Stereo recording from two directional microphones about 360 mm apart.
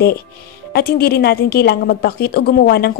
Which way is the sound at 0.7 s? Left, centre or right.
Left.